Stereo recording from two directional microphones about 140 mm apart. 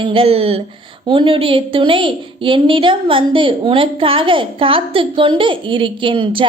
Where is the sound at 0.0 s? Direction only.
40° right (ahead or behind).